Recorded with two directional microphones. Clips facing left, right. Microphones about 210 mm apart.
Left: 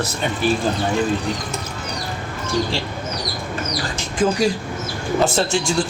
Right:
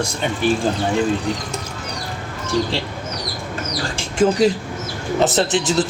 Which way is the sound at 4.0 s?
25° right (ahead or behind).